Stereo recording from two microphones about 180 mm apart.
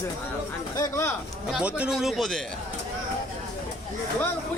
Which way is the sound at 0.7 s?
20° left (ahead or behind).